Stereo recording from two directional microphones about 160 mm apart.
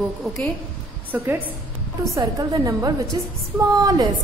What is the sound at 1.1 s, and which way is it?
Speech, 15° right (ahead or behind).